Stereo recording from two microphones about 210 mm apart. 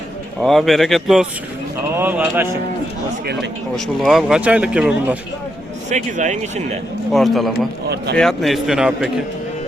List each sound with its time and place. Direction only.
0.4 s speech: centre (ahead or behind)
2.0 s a sound: 10° right (ahead or behind)
4.0 s speech: centre (ahead or behind)
5.9 s speech: 35° right (ahead or behind)
7.1 s speech: centre (ahead or behind)